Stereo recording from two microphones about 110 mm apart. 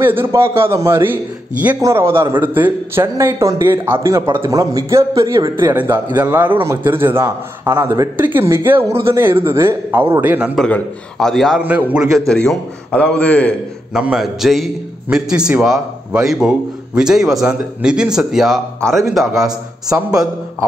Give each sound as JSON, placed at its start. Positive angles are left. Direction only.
{"t": 0.0, "sound": "a man's voice", "side_deg": -20}
{"t": 11.1, "sound": "a man's voice", "side_deg": 0}
{"t": 11.6, "sound": "a man's voice", "side_deg": -10}
{"t": 12.3, "sound": "a man's voice", "side_deg": 5}
{"t": 13.9, "sound": "a man's voice", "side_deg": -5}